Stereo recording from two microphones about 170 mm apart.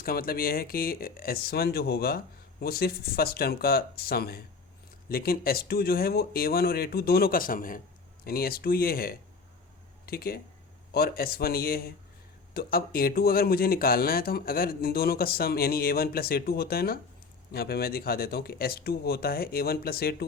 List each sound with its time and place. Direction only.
0.0 s speech: 60° left (ahead or behind)